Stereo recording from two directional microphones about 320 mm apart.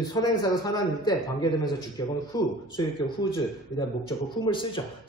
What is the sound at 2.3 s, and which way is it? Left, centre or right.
Speech, centre.